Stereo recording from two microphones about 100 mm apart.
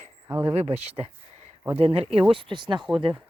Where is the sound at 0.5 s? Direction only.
90° right.